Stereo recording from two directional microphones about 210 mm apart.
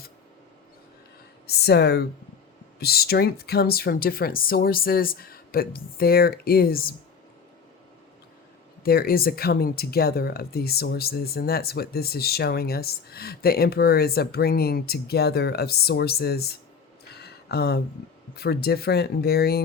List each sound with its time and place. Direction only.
1.5 s speech: 50° left (ahead or behind)
8.8 s speech: 45° left (ahead or behind)
17.1 s a sound: 50° left (ahead or behind)
18.3 s speech: 50° left (ahead or behind)